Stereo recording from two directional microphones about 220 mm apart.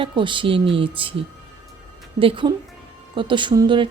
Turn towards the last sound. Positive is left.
turn(degrees=-20)  # may be behind; listen again after turning